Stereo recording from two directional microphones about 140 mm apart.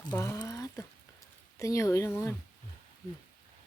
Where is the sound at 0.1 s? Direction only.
25° left (ahead or behind).